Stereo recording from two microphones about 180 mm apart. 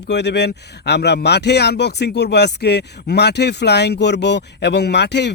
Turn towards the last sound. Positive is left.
turn(degrees=70)  # may be behind; listen again after turning